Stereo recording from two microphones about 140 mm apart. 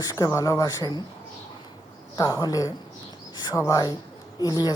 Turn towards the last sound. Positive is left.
turn(degrees=30)  # may be behind; listen again after turning